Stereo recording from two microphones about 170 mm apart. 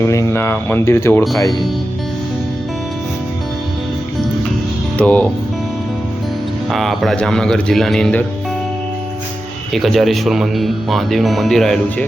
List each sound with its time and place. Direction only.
0.0 s speech: 15° left (ahead or behind)
4.9 s speech: 10° left (ahead or behind)
6.7 s speech: centre (ahead or behind)
9.7 s speech: centre (ahead or behind)